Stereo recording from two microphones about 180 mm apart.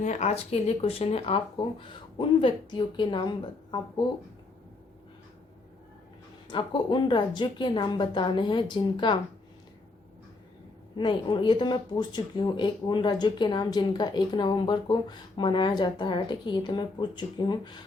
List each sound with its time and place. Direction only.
0.0 s speech: 40° left (ahead or behind)
6.5 s speech: 25° left (ahead or behind)
10.9 s speech: 25° left (ahead or behind)